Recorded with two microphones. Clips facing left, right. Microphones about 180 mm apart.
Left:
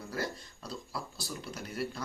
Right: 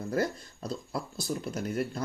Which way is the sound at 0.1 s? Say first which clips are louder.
Right 7 dB; 50° right (ahead or behind).